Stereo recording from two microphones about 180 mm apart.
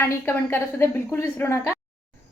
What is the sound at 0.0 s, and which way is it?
A woman's voice, 15° left (ahead or behind).